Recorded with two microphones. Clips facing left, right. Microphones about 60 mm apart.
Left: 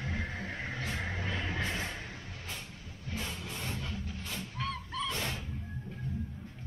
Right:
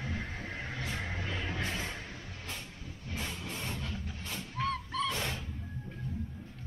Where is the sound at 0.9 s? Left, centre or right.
Centre.